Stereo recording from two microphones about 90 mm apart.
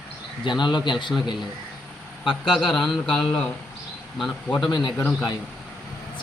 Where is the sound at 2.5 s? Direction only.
Centre (ahead or behind).